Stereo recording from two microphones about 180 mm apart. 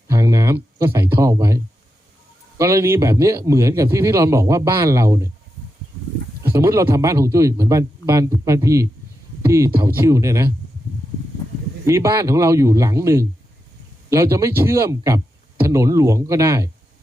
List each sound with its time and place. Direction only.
0.1 s a sound: 15° right (ahead or behind)
0.9 s a man's voice: 15° right (ahead or behind)
6.5 s a man's voice: 15° right (ahead or behind)
11.9 s a man's voice: 15° right (ahead or behind)